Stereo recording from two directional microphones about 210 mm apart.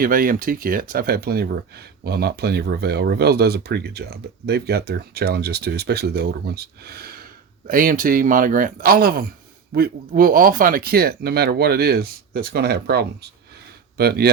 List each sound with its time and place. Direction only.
0.0 s a man's voice: 40° right (ahead or behind)